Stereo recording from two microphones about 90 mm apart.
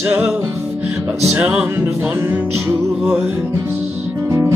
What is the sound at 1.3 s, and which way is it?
Music, 15° right (ahead or behind).